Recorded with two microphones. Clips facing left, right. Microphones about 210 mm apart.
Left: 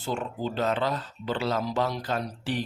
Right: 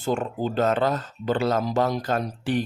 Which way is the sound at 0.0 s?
50° right (ahead or behind).